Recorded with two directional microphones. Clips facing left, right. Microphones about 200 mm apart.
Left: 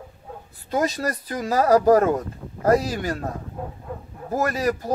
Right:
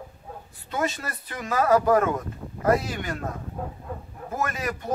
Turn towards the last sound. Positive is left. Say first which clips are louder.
# left 6 dB
turn(degrees=35)  # may be behind; listen again after turning